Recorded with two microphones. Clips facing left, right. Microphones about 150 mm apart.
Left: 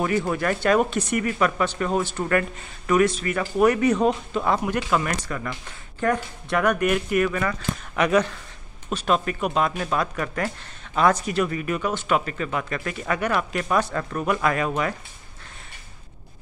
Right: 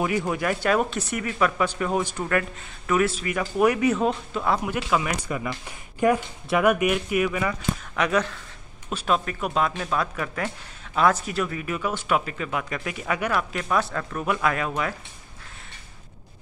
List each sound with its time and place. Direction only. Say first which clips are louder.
0.3 s speech: left 2 dB; 10° right (ahead or behind)
7.9 s speech: left 4 dB; centre (ahead or behind)